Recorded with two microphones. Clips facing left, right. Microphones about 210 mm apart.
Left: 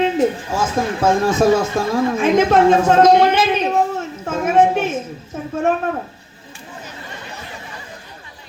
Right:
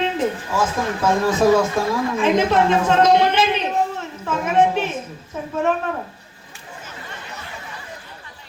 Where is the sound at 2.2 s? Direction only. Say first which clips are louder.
Left 4 dB; 45° left (ahead or behind).